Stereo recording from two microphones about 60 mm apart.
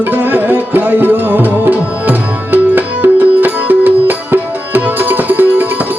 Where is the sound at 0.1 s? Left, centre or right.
Right.